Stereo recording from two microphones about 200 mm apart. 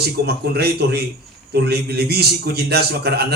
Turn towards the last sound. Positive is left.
turn(degrees=-50)  # may be behind; listen again after turning